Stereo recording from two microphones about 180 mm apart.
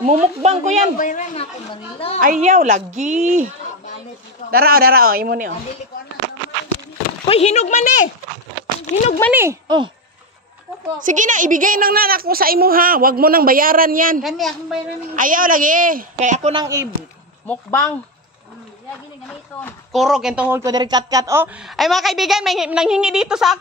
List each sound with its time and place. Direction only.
0.0 s speech: 40° right (ahead or behind)
0.9 s a woman's voice: 45° left (ahead or behind)
2.1 s a woman's voice: 45° right (ahead or behind)
4.5 s a man's voice: 55° right (ahead or behind)
7.2 s a woman's voice: 35° left (ahead or behind)
9.3 s speech: 15° right (ahead or behind)
11.0 s a woman's voice: 45° right (ahead or behind)
14.2 s a woman's voice: centre (ahead or behind)
15.1 s a woman's voice: 50° right (ahead or behind)
16.5 s speech: 15° right (ahead or behind)
17.5 s speech: 10° left (ahead or behind)
19.2 s speech: 5° left (ahead or behind); by 21.5 s 20° right (ahead or behind)
21.5 s a woman's voice: centre (ahead or behind)